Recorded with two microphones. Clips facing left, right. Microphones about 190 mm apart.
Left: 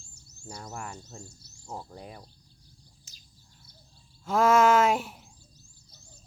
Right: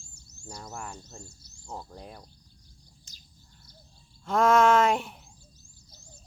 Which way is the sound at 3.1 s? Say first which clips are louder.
Right 2 dB; 5° left (ahead or behind).